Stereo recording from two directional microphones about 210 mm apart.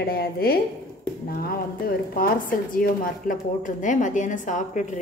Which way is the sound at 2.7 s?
40° left (ahead or behind).